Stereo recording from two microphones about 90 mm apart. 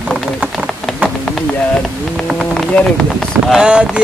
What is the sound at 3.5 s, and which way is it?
Speech, 10° right (ahead or behind).